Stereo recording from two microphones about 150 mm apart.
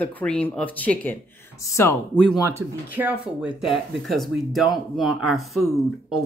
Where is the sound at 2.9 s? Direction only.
10° right (ahead or behind).